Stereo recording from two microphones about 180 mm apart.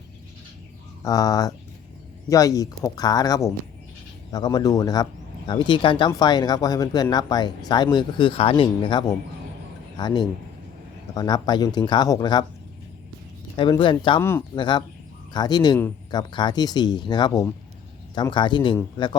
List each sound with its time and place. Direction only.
1.0 s speech: 20° left (ahead or behind)
13.6 s speech: 25° left (ahead or behind)
14.2 s speech: 15° left (ahead or behind)
14.5 s speech: 25° left (ahead or behind)